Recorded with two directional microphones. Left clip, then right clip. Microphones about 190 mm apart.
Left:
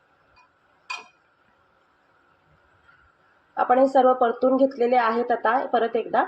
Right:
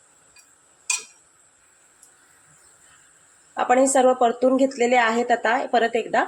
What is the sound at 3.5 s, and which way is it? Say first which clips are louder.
Speech: even; 20° right (ahead or behind).